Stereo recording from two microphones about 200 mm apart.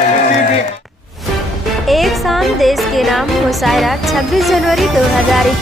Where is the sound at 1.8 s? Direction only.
Centre (ahead or behind).